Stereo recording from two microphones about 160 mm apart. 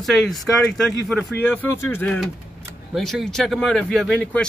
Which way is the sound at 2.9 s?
Centre (ahead or behind).